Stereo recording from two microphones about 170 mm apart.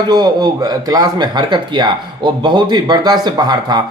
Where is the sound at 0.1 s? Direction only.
25° right (ahead or behind).